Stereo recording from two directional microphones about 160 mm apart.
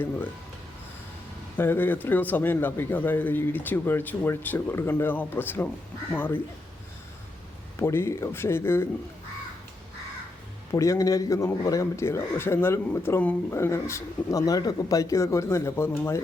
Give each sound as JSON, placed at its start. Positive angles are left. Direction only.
{"t": 1.5, "sound": "a man's voice", "side_deg": 15}
{"t": 7.8, "sound": "a man's voice", "side_deg": 15}
{"t": 10.7, "sound": "a man's voice", "side_deg": 20}